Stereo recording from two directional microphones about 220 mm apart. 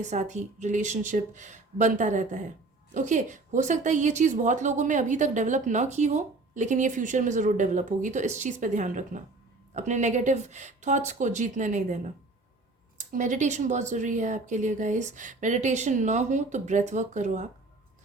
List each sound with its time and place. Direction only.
0.0 s a woman's voice: 35° right (ahead or behind)